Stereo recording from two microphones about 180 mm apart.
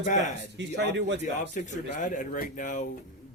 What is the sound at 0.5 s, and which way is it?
Speech, 75° right (ahead or behind).